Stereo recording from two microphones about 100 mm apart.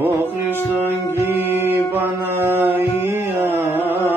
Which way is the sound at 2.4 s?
20° right (ahead or behind).